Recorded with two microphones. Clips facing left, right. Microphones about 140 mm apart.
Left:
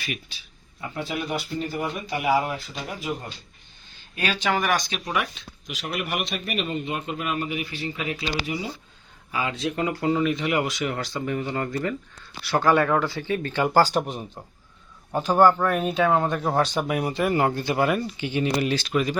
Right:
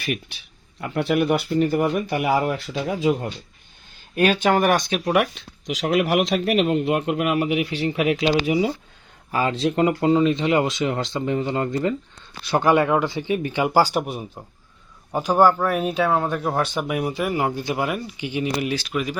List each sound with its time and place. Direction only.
0.0 s speech: 60° right (ahead or behind)
4.1 s speech: 55° right (ahead or behind); by 8.7 s 90° right
9.3 s speech: 40° right (ahead or behind); by 19.1 s 10° right (ahead or behind)